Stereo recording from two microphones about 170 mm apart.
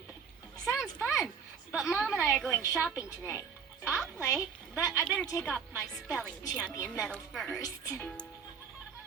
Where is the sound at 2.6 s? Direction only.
20° left (ahead or behind).